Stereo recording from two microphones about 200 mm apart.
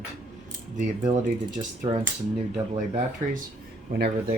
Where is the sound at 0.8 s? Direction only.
40° right (ahead or behind).